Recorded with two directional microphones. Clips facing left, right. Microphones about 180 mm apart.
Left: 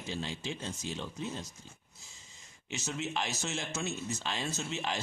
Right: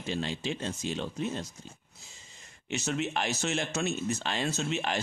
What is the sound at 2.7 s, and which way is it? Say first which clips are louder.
Speech: right 5 dB; 65° right (ahead or behind).